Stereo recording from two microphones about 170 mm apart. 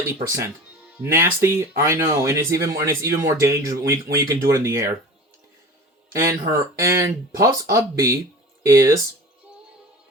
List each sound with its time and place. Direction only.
0.1 s speech: 15° right (ahead or behind)
6.1 s speech: 20° right (ahead or behind)